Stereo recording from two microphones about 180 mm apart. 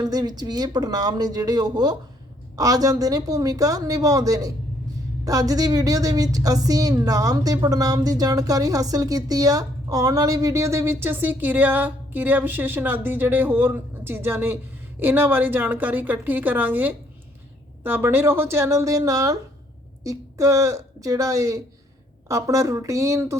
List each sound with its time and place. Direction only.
0.0 s a woman's voice: 20° right (ahead or behind)